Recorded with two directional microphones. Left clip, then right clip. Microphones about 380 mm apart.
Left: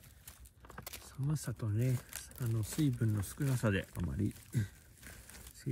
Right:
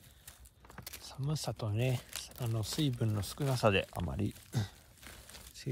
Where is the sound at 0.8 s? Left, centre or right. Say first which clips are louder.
Right 2 dB; centre.